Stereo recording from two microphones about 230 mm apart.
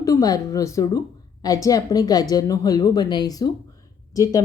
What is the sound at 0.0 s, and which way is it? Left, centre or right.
A woman's voice, centre.